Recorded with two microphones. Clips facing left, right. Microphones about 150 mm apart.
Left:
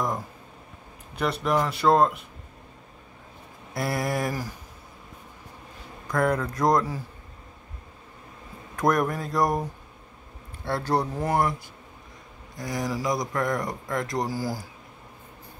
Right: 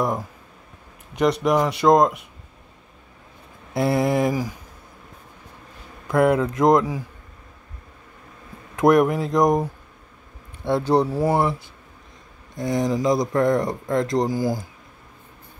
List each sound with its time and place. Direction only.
1.4 s speech: 15° right (ahead or behind)
3.7 s speech: 25° right (ahead or behind)
6.1 s speech: 10° right (ahead or behind)
6.4 s speech: 20° right (ahead or behind)
8.7 s speech: 20° right (ahead or behind)
10.9 s speech: 10° right (ahead or behind)
12.5 s speech: 25° right (ahead or behind)